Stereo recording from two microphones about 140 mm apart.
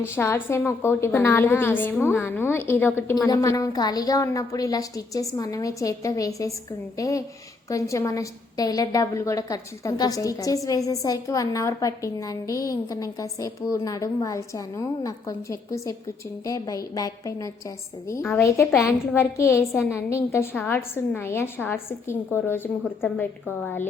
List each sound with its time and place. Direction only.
0.2 s a woman's voice: 15° left (ahead or behind)